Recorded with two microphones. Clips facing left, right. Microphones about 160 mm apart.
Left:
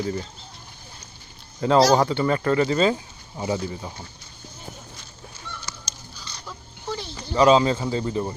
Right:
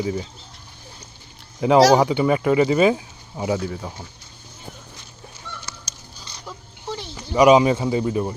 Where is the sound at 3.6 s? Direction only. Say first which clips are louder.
Right 3 dB; centre (ahead or behind).